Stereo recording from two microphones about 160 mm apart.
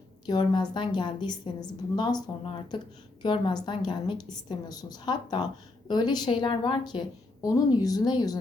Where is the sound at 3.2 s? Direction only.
30° left (ahead or behind).